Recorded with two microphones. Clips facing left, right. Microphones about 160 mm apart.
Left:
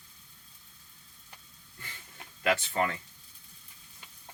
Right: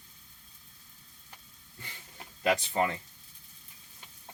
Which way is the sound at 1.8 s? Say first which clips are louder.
Right 1 dB; 20° right (ahead or behind).